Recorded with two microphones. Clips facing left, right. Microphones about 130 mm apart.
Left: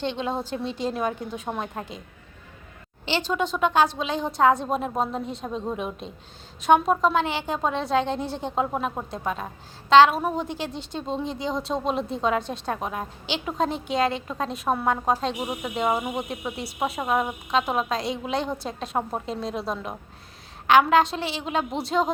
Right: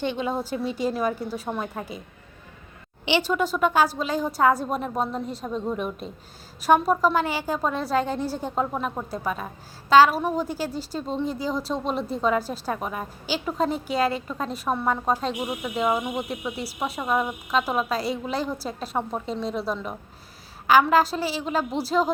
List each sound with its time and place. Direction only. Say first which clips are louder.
0.0 s a woman's voice: right 1 dB; 10° right (ahead or behind)
3.1 s a woman's voice: right 2 dB; 10° right (ahead or behind)
15.6 s speech: right 1 dB; 30° left (ahead or behind)
16.0 s a woman's voice: even; 5° left (ahead or behind)